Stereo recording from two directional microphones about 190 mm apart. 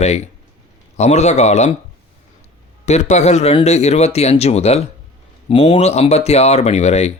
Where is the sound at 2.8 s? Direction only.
35° left (ahead or behind).